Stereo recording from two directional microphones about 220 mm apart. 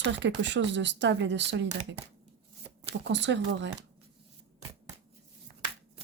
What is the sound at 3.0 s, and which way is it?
Speech, 55° right (ahead or behind).